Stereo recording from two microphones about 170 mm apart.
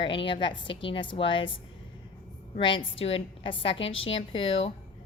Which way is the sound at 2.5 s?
30° left (ahead or behind).